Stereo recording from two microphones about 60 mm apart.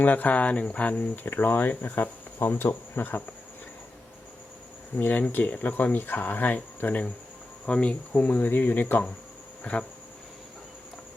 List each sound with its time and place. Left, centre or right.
0.0 s speech: left
3.0 s speech: left
4.9 s speech: left
7.6 s speech: centre; by 9.0 s left